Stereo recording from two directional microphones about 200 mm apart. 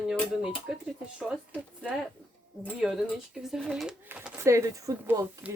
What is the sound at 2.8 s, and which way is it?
Speech, centre (ahead or behind).